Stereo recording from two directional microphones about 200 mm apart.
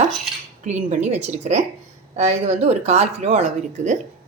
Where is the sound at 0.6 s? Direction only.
35° right (ahead or behind).